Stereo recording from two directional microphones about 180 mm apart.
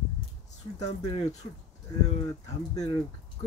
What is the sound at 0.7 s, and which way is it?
Speech, 35° left (ahead or behind).